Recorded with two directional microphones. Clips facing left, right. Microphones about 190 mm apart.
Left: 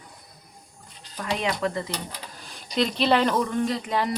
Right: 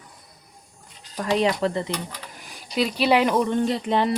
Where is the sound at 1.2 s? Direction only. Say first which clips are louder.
Right 5 dB; 35° right (ahead or behind).